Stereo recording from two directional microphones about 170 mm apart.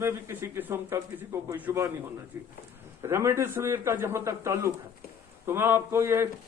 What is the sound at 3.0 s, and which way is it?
Speech, 15° right (ahead or behind).